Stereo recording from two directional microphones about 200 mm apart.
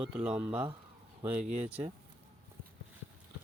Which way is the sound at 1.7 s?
10° right (ahead or behind).